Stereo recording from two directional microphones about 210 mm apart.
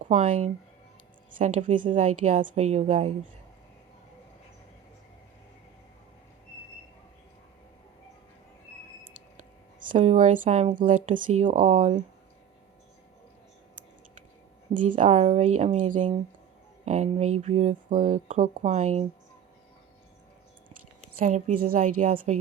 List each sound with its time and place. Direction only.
0.0 s speech: 35° right (ahead or behind)
9.4 s speech: 40° right (ahead or behind)
14.7 s speech: 40° right (ahead or behind)
21.2 s speech: 35° right (ahead or behind)